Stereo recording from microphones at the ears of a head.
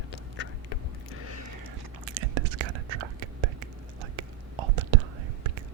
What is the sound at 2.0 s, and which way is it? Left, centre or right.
Whispering, right.